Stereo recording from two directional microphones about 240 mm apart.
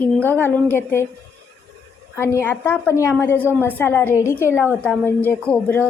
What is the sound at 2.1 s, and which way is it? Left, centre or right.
A woman's voice, centre.